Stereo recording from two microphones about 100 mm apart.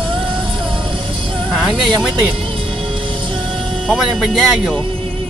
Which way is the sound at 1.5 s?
10° right (ahead or behind).